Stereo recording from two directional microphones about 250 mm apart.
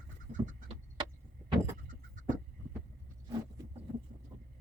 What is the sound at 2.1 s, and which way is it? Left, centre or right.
Vehicle, right.